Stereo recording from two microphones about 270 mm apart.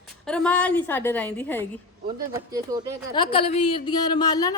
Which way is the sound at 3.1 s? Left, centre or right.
Centre.